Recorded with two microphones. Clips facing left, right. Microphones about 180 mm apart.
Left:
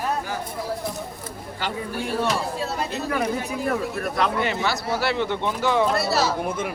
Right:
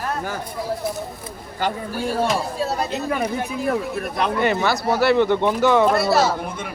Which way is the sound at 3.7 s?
20° right (ahead or behind).